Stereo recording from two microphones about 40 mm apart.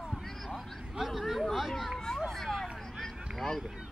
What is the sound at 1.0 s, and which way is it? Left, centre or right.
Vehicle, centre.